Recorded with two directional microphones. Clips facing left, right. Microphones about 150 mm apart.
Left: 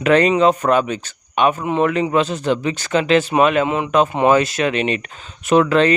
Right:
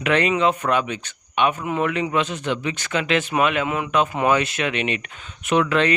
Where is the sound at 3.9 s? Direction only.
35° left (ahead or behind).